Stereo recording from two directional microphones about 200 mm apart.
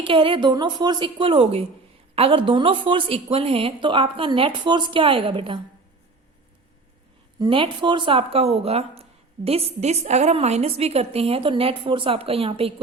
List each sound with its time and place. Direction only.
0.0 s speech: 25° right (ahead or behind)
7.3 s speech: 25° right (ahead or behind)